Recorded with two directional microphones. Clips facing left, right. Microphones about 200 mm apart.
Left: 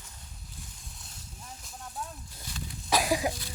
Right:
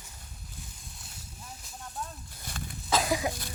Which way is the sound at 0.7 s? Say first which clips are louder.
Right 1 dB; centre (ahead or behind).